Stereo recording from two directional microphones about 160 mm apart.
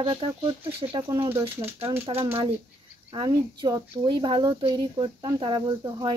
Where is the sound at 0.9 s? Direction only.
20° right (ahead or behind).